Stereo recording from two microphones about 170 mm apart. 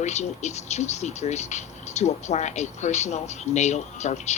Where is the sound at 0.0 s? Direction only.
40° left (ahead or behind).